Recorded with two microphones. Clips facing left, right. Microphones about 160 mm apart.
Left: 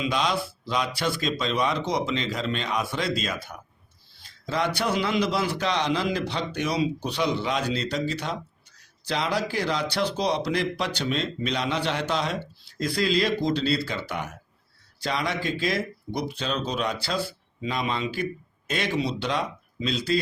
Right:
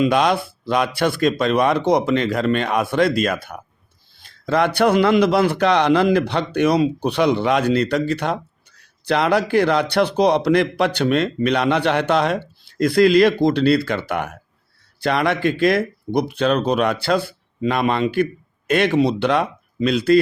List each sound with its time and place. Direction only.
0.0 s speech: 60° right (ahead or behind)